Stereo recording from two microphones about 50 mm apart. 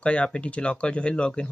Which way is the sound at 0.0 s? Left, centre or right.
Left.